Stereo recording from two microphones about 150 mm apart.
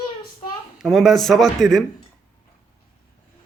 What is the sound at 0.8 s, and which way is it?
Speech, centre (ahead or behind).